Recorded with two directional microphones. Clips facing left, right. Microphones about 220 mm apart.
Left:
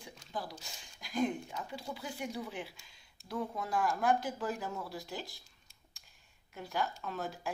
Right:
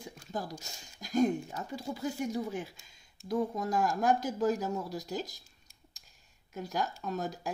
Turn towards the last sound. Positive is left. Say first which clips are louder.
# right 4 dB
turn(degrees=-40)  # may be behind; listen again after turning